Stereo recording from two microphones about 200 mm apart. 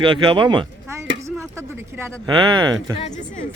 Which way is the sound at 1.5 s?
10° right (ahead or behind).